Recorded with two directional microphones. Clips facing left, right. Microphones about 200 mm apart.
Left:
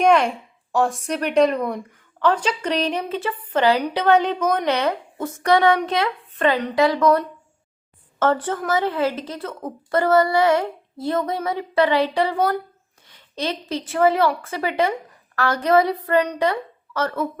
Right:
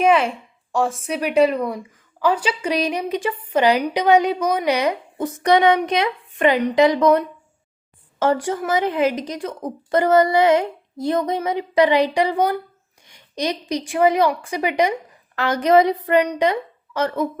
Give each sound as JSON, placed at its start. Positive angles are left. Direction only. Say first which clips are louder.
{"t": 0.0, "sound": "a woman's voice", "louder": "even", "side_deg": -5}